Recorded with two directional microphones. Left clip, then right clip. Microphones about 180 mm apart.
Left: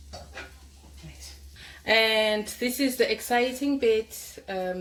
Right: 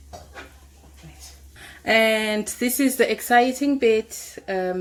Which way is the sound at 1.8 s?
65° right (ahead or behind).